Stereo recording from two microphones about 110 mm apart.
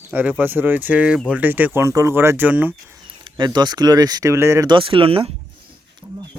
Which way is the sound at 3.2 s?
45° right (ahead or behind).